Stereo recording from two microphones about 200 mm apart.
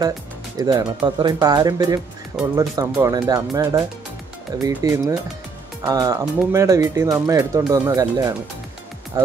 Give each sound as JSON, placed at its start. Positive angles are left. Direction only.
{"t": 0.6, "sound": "speech", "side_deg": -20}
{"t": 9.1, "sound": "music", "side_deg": -15}